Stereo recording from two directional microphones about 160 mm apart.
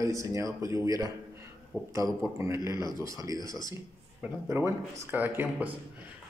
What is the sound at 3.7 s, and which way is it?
Speech, 15° right (ahead or behind).